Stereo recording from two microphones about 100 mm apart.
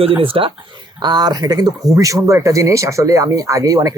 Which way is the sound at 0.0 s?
65° right (ahead or behind).